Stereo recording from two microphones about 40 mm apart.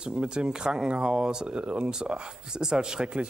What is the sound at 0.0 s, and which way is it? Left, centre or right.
Speech, right.